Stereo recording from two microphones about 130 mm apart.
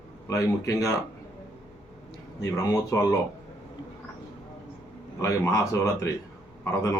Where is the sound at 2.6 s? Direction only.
25° left (ahead or behind).